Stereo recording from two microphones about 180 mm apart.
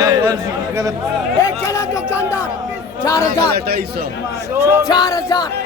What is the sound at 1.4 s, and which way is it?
A man's voice, 15° left (ahead or behind).